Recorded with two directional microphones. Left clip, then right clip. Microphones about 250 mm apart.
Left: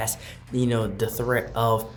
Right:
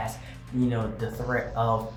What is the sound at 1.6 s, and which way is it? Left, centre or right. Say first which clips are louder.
Speech: left 2 dB; left.